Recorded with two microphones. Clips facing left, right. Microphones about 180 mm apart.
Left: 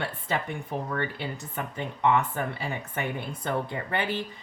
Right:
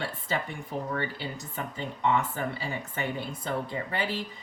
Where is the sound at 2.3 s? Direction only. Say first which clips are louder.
Left 1 dB; 60° left (ahead or behind).